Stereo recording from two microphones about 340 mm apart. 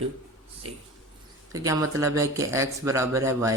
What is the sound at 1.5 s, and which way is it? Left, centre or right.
Speech, centre.